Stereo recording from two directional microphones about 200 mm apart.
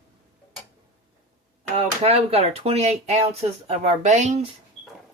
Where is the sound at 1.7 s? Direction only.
30° right (ahead or behind).